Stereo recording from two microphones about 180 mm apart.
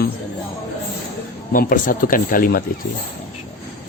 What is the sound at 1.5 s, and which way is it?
A man's voice, 50° left (ahead or behind).